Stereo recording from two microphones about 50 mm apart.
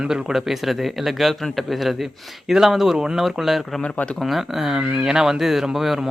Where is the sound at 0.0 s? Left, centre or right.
Centre.